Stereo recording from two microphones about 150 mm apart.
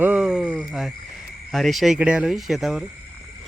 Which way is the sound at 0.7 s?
Centre (ahead or behind).